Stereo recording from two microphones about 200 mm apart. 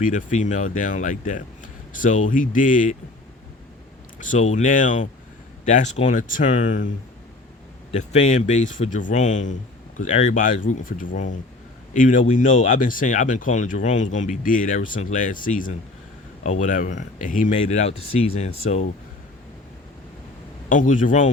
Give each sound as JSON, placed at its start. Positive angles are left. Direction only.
{"t": 0.0, "sound": "speech", "side_deg": 40}
{"t": 4.2, "sound": "speech", "side_deg": 40}
{"t": 7.9, "sound": "speech", "side_deg": 35}
{"t": 20.7, "sound": "speech", "side_deg": 40}